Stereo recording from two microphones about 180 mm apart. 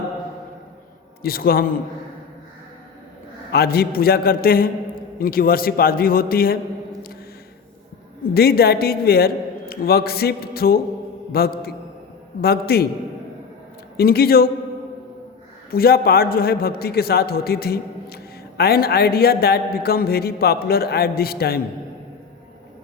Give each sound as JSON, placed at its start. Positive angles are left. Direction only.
{"t": 1.2, "sound": "a man's voice", "side_deg": 55}
{"t": 3.5, "sound": "a man's voice", "side_deg": 60}
{"t": 8.3, "sound": "a man's voice", "side_deg": 60}
{"t": 13.9, "sound": "a man's voice", "side_deg": 60}
{"t": 15.7, "sound": "a man's voice", "side_deg": 55}